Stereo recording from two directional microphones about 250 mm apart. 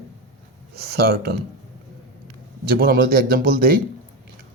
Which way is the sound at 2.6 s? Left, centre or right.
Right.